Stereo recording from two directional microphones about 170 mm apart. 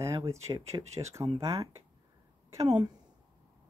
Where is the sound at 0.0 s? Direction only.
15° right (ahead or behind).